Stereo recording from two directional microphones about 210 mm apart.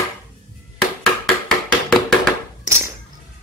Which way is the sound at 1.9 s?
Centre (ahead or behind).